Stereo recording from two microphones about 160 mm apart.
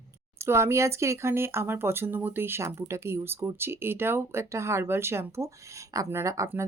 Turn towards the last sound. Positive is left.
turn(degrees=-15)  # may be behind; listen again after turning